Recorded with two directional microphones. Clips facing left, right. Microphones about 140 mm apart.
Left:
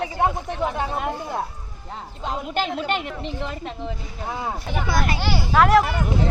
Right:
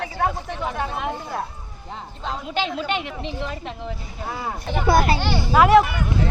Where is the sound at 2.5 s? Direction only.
45° left (ahead or behind).